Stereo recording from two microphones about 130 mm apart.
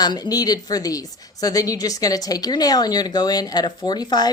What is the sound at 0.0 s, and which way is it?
A woman's voice, 30° left (ahead or behind).